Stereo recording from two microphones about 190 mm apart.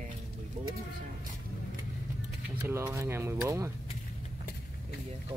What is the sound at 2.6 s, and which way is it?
Speech, 10° right (ahead or behind).